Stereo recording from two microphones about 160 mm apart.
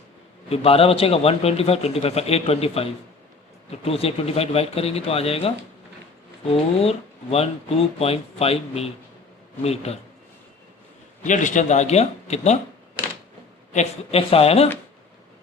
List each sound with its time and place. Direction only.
0.4 s speech: 35° left (ahead or behind)
11.2 s a man's voice: 50° left (ahead or behind)
13.7 s speech: 35° left (ahead or behind)